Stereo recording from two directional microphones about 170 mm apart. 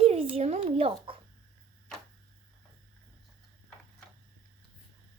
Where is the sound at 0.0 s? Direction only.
35° right (ahead or behind).